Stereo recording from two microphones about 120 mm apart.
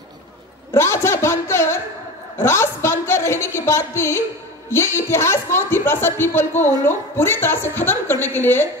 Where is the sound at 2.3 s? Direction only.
20° left (ahead or behind).